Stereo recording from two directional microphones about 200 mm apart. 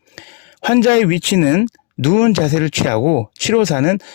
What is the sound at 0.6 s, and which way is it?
Speech, 50° left (ahead or behind).